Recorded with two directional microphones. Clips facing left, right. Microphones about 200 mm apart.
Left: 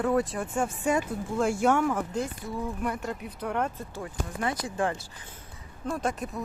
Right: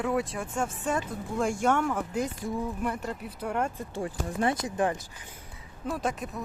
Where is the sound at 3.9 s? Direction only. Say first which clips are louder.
Right 4 dB; 25° right (ahead or behind).